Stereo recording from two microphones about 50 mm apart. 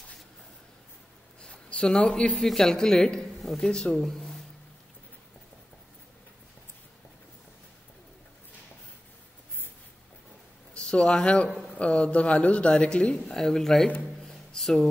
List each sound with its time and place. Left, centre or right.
1.4 s a sound: left
2.3 s speech: centre
10.7 s a woman's voice: left
13.2 s speech: centre
14.2 s music: centre